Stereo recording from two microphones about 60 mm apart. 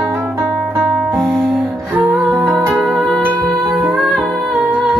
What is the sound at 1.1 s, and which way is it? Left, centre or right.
Music, centre.